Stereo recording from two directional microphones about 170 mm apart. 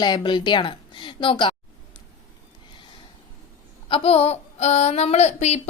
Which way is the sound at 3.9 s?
30° left (ahead or behind).